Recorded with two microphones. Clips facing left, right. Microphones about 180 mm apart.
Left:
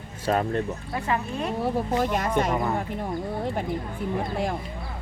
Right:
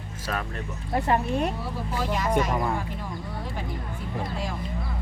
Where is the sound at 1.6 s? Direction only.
55° left (ahead or behind).